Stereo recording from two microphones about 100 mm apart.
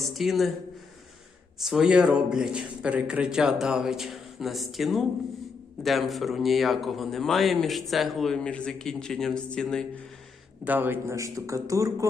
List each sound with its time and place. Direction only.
0.1 s speech: centre (ahead or behind)
1.6 s speech: 5° right (ahead or behind)
8.4 s speech: 10° left (ahead or behind)
10.6 s a man's voice: 20° right (ahead or behind)